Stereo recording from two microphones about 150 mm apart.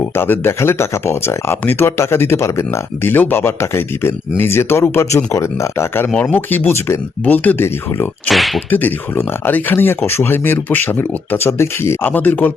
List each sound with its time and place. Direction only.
0.2 s speech: 15° left (ahead or behind)
8.3 s whip: centre (ahead or behind)
8.7 s speech: 10° left (ahead or behind)